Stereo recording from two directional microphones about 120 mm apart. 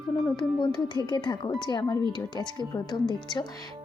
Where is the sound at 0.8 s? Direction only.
40° left (ahead or behind).